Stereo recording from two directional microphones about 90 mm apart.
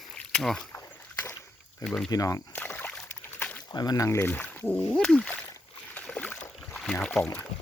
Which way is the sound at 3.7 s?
45° left (ahead or behind).